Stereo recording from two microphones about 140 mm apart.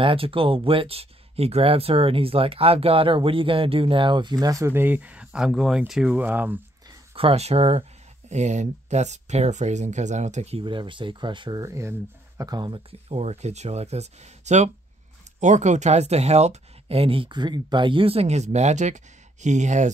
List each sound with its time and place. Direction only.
0.0 s speech: 40° right (ahead or behind); by 6.6 s 10° right (ahead or behind)
7.2 s speech: 45° right (ahead or behind)
10.6 s speech: 35° right (ahead or behind)
11.6 s speech: 20° right (ahead or behind)
13.1 s speech: 50° right (ahead or behind)